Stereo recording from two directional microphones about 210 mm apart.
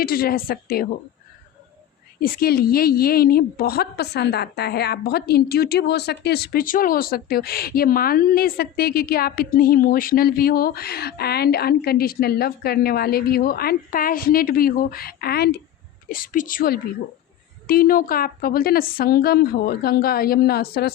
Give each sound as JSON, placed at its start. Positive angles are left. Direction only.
{"t": 0.0, "sound": "a woman's voice", "side_deg": 45}
{"t": 2.2, "sound": "a woman's voice", "side_deg": 45}